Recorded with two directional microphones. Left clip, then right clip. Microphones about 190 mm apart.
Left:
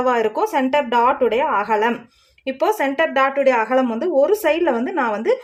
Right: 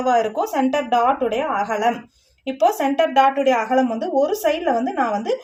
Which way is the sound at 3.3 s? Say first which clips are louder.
Left 2 dB; 45° left (ahead or behind).